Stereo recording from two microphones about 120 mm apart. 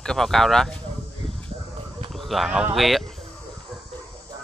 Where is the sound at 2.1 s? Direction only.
Centre (ahead or behind).